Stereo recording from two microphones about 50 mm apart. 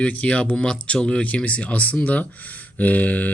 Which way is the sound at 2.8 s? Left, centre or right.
Left.